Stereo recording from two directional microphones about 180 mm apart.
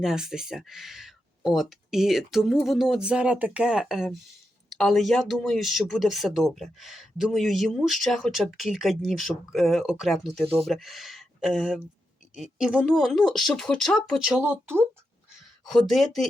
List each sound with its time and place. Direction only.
0.0 s speech: centre (ahead or behind)
15.6 s speech: centre (ahead or behind)